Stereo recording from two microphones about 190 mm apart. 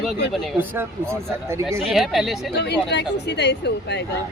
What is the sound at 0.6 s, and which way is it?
Speech, 10° right (ahead or behind).